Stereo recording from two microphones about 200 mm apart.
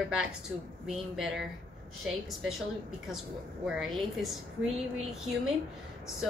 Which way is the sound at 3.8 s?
Centre (ahead or behind).